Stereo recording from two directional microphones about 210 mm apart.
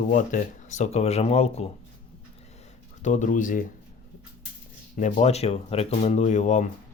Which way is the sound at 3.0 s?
35° left (ahead or behind).